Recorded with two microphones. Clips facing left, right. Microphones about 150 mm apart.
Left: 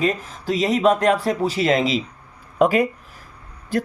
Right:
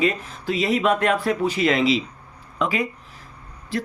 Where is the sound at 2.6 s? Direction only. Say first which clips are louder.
Left 7 dB; 50° left (ahead or behind).